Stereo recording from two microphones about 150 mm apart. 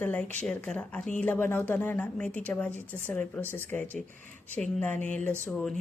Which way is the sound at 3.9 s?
60° right (ahead or behind).